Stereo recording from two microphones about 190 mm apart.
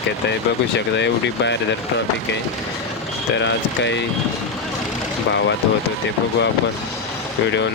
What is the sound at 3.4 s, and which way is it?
Speech, 70° left (ahead or behind).